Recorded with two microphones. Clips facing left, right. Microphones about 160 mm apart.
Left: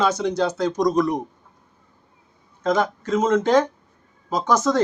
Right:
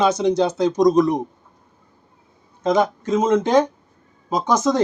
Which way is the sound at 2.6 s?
20° right (ahead or behind).